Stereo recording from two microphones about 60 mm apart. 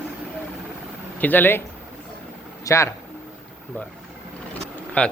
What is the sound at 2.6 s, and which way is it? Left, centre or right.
Speech, left.